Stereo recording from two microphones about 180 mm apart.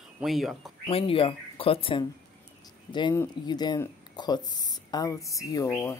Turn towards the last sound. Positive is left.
turn(degrees=20)  # may be behind; listen again after turning